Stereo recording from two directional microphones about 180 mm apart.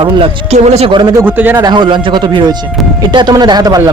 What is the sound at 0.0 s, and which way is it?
A man's voice, 35° right (ahead or behind).